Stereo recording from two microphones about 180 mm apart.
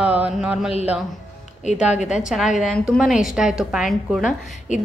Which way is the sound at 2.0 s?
40° left (ahead or behind).